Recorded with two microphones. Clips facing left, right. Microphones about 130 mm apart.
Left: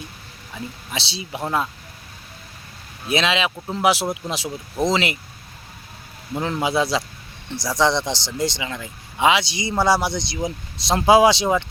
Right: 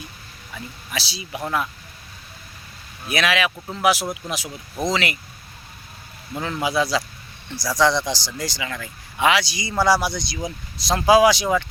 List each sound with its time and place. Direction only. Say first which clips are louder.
0.5 s speech: left 1 dB; 25° left (ahead or behind)
3.1 s speech: left 1 dB; 25° left (ahead or behind)
6.6 s speech: even; 25° left (ahead or behind)